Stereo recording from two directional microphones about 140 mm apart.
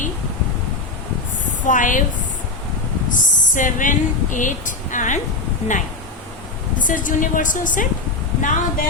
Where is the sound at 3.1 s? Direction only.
70° left (ahead or behind).